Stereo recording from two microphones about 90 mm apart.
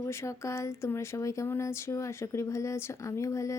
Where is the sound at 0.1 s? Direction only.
30° left (ahead or behind).